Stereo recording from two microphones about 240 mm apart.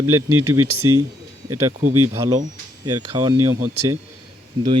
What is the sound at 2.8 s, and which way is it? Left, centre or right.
Speech, centre.